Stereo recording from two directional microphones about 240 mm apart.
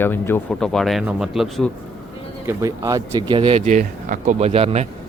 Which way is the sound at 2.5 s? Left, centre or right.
Centre.